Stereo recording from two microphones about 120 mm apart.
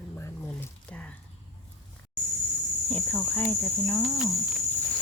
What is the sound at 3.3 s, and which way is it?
Speech, 20° left (ahead or behind).